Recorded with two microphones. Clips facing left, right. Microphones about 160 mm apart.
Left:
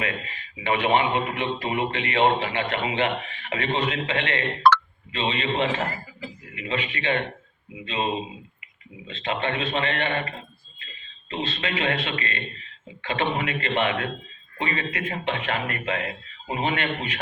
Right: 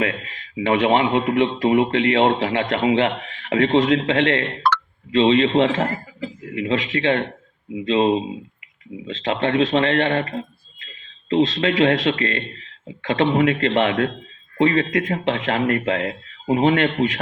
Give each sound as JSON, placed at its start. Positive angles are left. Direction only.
{"t": 0.5, "sound": "a man's voice", "side_deg": -85}
{"t": 6.5, "sound": "a man's voice", "side_deg": -75}
{"t": 11.3, "sound": "a man's voice", "side_deg": -80}
{"t": 15.6, "sound": "a man's voice", "side_deg": -55}